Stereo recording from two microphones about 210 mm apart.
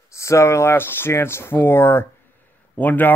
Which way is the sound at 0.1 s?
15° left (ahead or behind).